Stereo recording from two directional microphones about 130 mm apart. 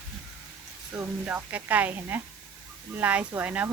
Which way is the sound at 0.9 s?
15° right (ahead or behind).